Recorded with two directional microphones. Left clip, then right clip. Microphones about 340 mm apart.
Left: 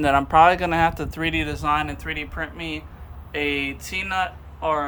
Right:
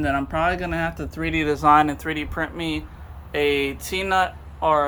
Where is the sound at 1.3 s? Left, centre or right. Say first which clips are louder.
Right 8 dB; centre.